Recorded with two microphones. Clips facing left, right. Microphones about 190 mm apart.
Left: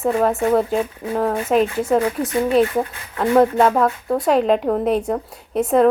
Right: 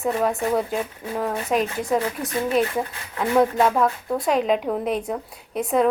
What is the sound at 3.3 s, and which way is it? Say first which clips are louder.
Speech: left 4 dB; 35° left (ahead or behind).